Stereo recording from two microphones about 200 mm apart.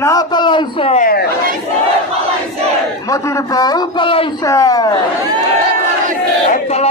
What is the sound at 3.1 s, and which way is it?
A man's voice, 20° left (ahead or behind).